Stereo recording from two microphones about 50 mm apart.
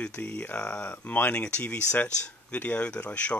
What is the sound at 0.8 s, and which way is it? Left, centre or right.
Speech, left.